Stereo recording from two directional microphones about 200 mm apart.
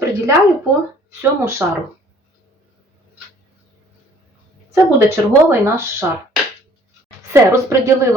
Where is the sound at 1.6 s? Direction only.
10° right (ahead or behind).